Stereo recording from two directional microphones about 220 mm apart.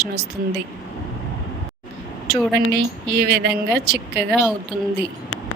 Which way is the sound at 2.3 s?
45° right (ahead or behind).